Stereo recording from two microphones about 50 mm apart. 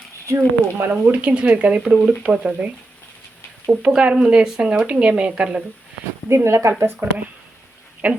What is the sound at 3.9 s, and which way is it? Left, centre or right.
Speech, centre.